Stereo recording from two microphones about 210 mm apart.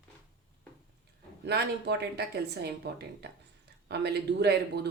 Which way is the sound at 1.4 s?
55° right (ahead or behind).